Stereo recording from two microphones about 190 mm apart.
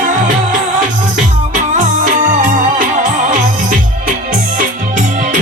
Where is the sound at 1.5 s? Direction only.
40° right (ahead or behind).